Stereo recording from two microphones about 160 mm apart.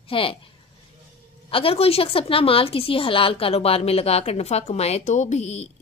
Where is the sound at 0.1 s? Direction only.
35° left (ahead or behind).